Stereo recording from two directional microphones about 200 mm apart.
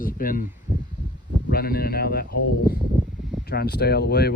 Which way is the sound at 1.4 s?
50° left (ahead or behind).